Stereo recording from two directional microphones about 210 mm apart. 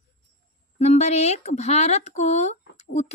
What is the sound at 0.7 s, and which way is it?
A woman's voice, 30° left (ahead or behind).